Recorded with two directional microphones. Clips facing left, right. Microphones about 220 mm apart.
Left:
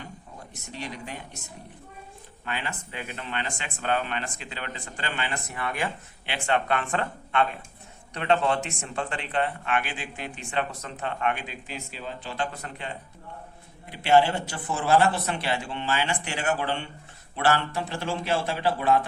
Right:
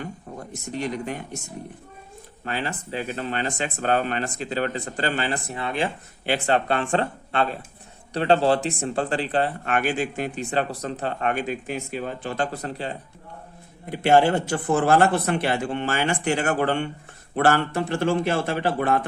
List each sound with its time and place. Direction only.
0.7 s speech: 50° right (ahead or behind)
2.4 s speech: 40° right (ahead or behind)
6.2 s speech: 40° right (ahead or behind)
12.6 s speech: 35° right (ahead or behind)
13.9 s speech: 50° right (ahead or behind)